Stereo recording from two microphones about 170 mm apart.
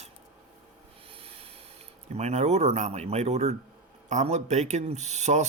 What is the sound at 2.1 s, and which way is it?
Speech, 40° right (ahead or behind).